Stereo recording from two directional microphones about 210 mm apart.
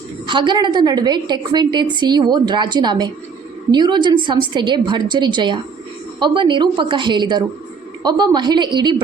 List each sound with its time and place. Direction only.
0.3 s a woman's voice: 20° right (ahead or behind)